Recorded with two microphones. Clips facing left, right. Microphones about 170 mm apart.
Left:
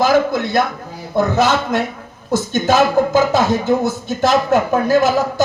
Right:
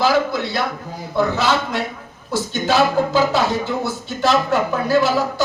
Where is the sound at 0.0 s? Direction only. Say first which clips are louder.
Left 3 dB; 45° left (ahead or behind).